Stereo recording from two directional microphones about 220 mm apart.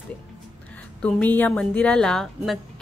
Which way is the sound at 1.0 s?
5° left (ahead or behind).